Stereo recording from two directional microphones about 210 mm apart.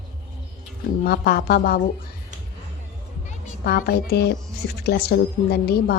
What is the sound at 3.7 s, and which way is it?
A woman's voice, 50° left (ahead or behind).